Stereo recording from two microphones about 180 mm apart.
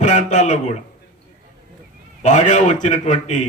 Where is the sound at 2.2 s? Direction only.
40° left (ahead or behind).